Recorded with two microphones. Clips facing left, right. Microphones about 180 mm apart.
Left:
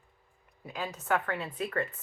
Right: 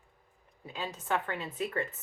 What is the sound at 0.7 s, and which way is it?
Speech, 25° right (ahead or behind).